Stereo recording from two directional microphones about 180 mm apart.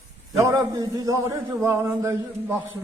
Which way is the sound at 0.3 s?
15° right (ahead or behind).